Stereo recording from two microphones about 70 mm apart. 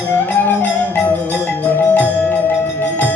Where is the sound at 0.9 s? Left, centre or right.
Left.